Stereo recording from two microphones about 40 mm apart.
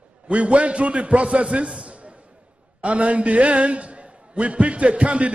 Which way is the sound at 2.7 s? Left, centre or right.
Right.